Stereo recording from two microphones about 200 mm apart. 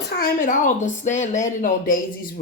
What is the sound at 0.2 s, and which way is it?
A woman's voice, 40° left (ahead or behind).